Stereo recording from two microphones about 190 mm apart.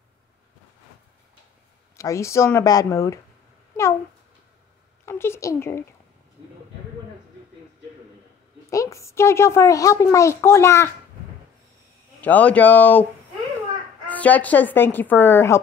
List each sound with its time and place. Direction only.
2.0 s a child's voice: 15° left (ahead or behind)
5.0 s a sound: 15° left (ahead or behind)
8.6 s a child's voice: 15° left (ahead or behind)
12.2 s a child's voice: 10° left (ahead or behind)
14.0 s a child's voice: 10° left (ahead or behind)